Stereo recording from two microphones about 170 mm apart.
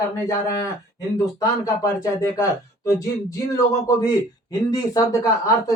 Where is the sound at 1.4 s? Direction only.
20° left (ahead or behind).